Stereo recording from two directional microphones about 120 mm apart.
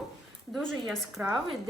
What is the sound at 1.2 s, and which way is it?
Speech, 15° right (ahead or behind).